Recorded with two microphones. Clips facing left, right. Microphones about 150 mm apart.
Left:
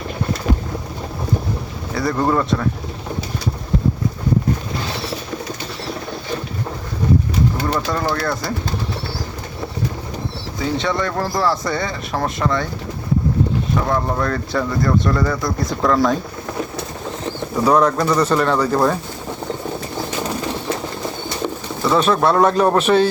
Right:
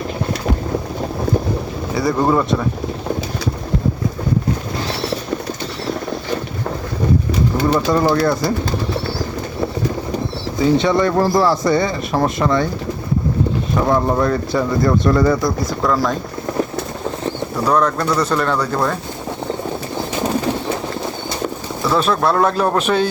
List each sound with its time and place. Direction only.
2.0 s speech: 10° right (ahead or behind)
7.7 s speech: 20° right (ahead or behind)
10.8 s speech: 10° right (ahead or behind)
13.8 s speech: 15° right (ahead or behind)
15.4 s speech: centre (ahead or behind)
17.7 s speech: 10° left (ahead or behind)
21.8 s speech: centre (ahead or behind)